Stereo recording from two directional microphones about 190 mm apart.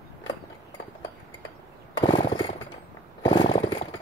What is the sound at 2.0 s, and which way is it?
Jackhammer, 25° left (ahead or behind).